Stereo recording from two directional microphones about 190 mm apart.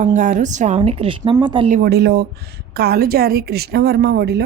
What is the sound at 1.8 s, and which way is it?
A woman's voice, 60° right (ahead or behind).